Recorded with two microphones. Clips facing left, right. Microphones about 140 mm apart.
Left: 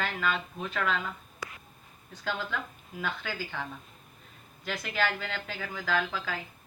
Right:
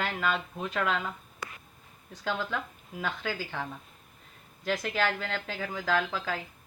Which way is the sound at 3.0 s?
35° right (ahead or behind).